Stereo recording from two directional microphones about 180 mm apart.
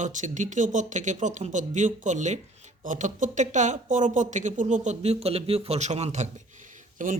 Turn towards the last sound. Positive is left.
turn(degrees=-45)  # may be behind; listen again after turning